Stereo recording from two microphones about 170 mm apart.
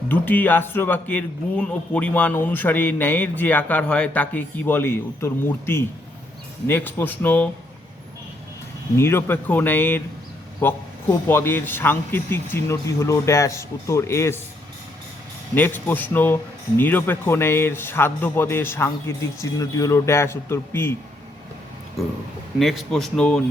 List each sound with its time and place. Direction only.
0.1 s a man's voice: 10° left (ahead or behind)
9.0 s a man's voice: 15° left (ahead or behind)
15.5 s a man's voice: 10° left (ahead or behind)
22.5 s speech: centre (ahead or behind)